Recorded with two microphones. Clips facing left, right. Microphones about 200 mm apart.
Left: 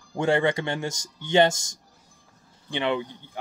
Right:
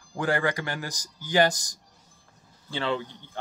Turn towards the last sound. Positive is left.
turn(degrees=20)  # may be behind; listen again after turning